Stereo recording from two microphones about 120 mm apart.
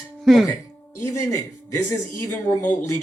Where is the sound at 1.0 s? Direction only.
25° left (ahead or behind).